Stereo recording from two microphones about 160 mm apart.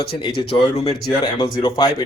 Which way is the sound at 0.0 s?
75° left (ahead or behind).